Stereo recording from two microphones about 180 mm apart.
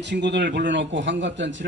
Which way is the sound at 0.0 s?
75° right (ahead or behind).